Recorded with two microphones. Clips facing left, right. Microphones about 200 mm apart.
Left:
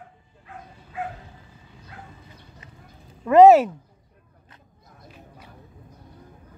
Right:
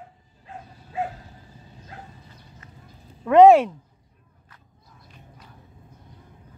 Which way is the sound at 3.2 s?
Centre (ahead or behind).